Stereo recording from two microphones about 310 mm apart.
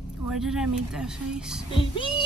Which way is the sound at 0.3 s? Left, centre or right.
Centre.